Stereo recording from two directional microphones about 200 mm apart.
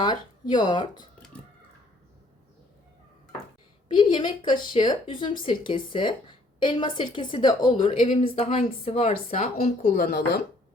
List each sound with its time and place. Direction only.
0.0 s a woman's voice: 20° left (ahead or behind)
3.9 s a woman's voice: 25° left (ahead or behind); by 10.4 s 55° left (ahead or behind)